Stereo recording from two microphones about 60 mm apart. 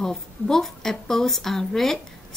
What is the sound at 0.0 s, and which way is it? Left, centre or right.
A woman's voice, centre.